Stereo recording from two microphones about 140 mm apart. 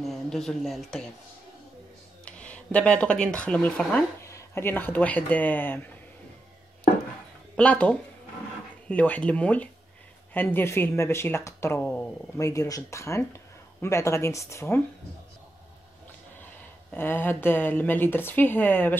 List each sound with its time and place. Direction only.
0.0 s speech: centre (ahead or behind)
2.2 s speech: 10° left (ahead or behind)
4.2 s a woman's voice: 20° left (ahead or behind)
7.5 s a woman's voice: 10° left (ahead or behind)
12.4 s speech: 20° left (ahead or behind)
16.9 s a woman's voice: 15° left (ahead or behind)